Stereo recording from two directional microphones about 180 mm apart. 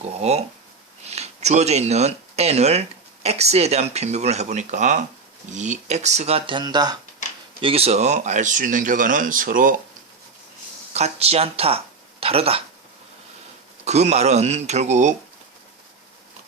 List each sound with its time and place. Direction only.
0.2 s speech: 35° right (ahead or behind)
7.6 s speech: 35° right (ahead or behind); by 9.7 s 50° right (ahead or behind)
10.9 s speech: 35° right (ahead or behind)
13.8 s speech: 40° right (ahead or behind)